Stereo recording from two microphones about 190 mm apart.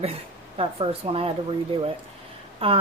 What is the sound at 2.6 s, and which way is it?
Speech, 30° right (ahead or behind).